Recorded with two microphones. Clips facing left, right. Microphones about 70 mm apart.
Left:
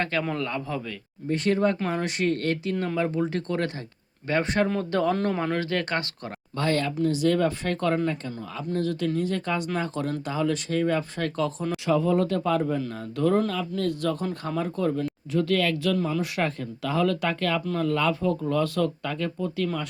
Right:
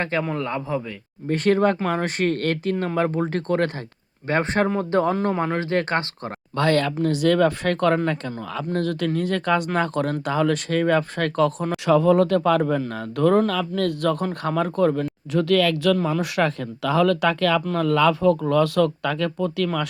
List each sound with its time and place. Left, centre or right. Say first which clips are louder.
0.0 s speech: right 3 dB; right
1.3 s speech: right 4 dB; right
6.6 s speech: right 5 dB; right
7.0 s speech: right 3 dB; right
12.9 s speech: right 5 dB; right
13.5 s speech: right 4 dB; right